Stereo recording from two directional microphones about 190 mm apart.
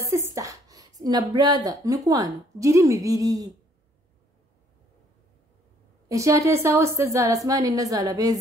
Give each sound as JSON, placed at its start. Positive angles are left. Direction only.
{"t": 0.1, "sound": "a sound", "side_deg": -15}
{"t": 1.0, "sound": "a woman's voice", "side_deg": -20}
{"t": 6.0, "sound": "speech", "side_deg": -15}